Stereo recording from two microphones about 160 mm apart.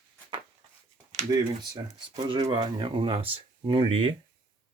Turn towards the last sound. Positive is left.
turn(degrees=-35)  # may be behind; listen again after turning